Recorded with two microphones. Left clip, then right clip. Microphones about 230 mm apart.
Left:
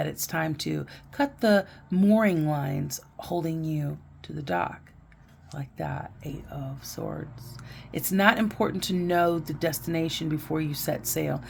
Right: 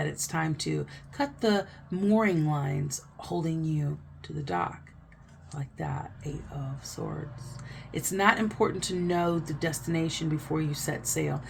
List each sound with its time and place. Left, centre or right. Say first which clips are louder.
0.0 s speech: left 2 dB; left
5.5 s speech: left 3 dB; left
7.9 s speech: left 2 dB; left